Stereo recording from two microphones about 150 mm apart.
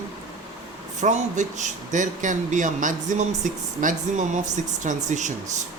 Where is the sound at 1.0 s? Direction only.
55° right (ahead or behind).